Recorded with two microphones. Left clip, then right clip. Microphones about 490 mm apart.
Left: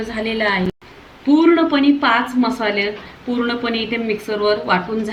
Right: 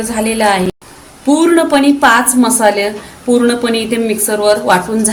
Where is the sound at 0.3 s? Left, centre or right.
Left.